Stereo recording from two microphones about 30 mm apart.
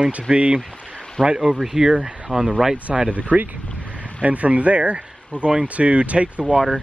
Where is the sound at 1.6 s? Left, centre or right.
Centre.